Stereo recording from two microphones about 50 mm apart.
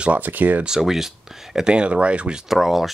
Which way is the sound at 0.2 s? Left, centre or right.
Right.